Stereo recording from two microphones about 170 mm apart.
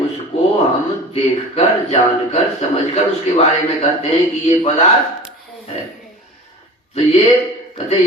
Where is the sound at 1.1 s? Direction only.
35° left (ahead or behind).